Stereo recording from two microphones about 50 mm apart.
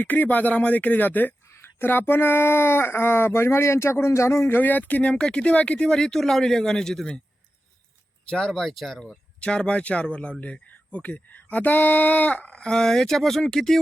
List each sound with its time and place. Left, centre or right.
0.0 s speech: left
1.5 s speech: left
4.5 s speech: left; by 7.1 s centre
8.3 s speech: centre
8.6 s speech: centre
9.4 s speech: left